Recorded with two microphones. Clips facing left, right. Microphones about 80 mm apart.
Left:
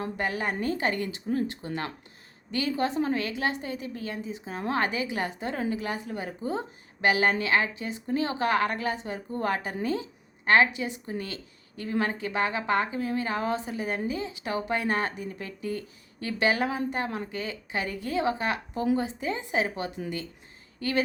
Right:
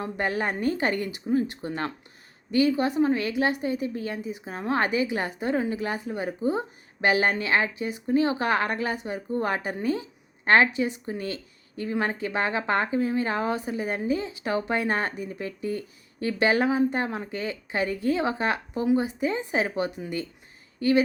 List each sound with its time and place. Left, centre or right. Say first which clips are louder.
0.0 s a woman's voice: right 2 dB; right
9.9 s a sound: right 1 dB; right
10.8 s a woman's voice: right 4 dB; right